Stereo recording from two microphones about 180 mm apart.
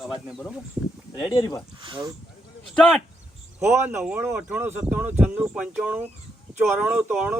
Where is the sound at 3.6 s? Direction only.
15° right (ahead or behind).